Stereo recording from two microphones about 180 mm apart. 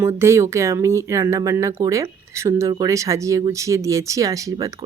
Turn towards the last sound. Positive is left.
turn(degrees=-20)  # may be behind; listen again after turning